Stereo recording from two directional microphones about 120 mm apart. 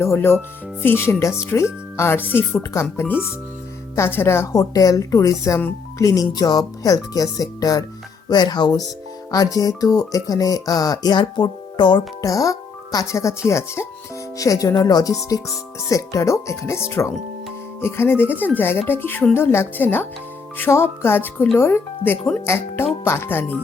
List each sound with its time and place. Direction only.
0.0 s a woman's voice: 20° left (ahead or behind)